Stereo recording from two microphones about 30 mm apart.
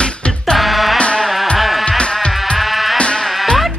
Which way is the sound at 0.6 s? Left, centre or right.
Centre.